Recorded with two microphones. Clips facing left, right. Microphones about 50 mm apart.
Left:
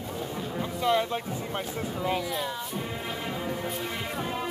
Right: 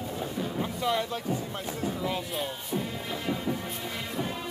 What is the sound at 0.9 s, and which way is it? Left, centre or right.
Boat, centre.